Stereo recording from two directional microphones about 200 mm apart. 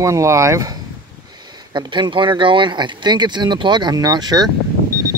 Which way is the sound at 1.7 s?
25° right (ahead or behind).